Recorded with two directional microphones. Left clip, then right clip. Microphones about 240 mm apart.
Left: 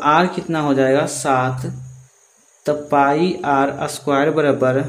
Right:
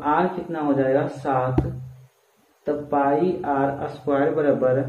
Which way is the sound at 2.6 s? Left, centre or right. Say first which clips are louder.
Left 6 dB; left.